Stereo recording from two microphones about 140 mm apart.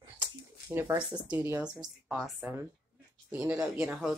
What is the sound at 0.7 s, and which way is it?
Speech, 15° right (ahead or behind).